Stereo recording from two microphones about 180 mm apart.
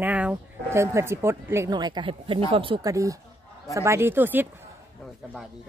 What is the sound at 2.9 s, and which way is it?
Speech, 15° right (ahead or behind).